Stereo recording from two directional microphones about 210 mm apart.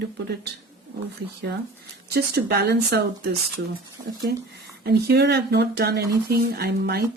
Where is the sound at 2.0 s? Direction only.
50° right (ahead or behind).